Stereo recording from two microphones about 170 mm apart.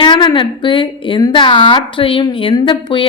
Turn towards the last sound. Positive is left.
turn(degrees=30)  # may be behind; listen again after turning